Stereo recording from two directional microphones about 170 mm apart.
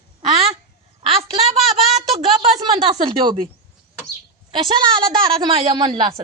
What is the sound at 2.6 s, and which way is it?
Speech, 25° right (ahead or behind).